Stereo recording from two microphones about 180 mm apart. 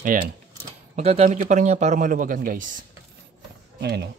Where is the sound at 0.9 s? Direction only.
35° right (ahead or behind).